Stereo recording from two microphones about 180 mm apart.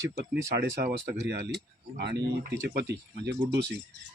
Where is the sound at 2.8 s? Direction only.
65° right (ahead or behind).